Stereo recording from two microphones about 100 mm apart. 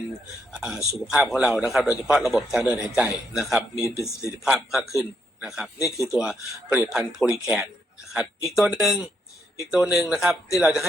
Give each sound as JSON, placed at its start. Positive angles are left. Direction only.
{"t": 0.6, "sound": "a man's voice", "side_deg": -5}